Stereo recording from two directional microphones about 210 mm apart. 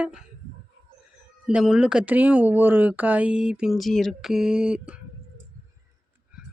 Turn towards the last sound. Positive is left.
turn(degrees=-5)  # may be behind; listen again after turning